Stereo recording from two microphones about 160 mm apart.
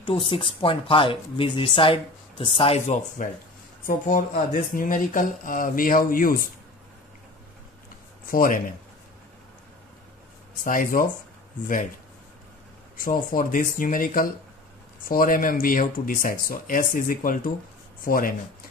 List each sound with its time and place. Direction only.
0.0 s speech: 35° left (ahead or behind)
3.2 s speech: 55° left (ahead or behind)
8.3 s speech: 60° left (ahead or behind)
10.6 s speech: 60° left (ahead or behind)
12.9 s speech: 60° left (ahead or behind)